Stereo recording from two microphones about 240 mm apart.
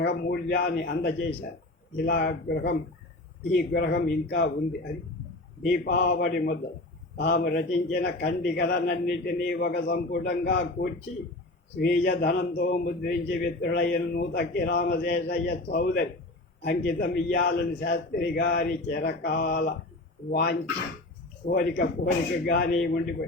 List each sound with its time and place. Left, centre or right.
0.0 s a man's voice: left
5.6 s a man's voice: left